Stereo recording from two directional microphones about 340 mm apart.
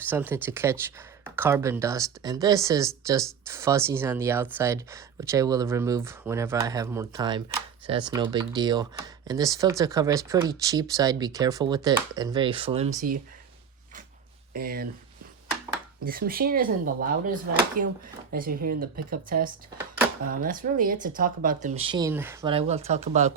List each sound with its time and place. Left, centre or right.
0.1 s speech: centre
14.5 s speech: right
16.0 s speech: right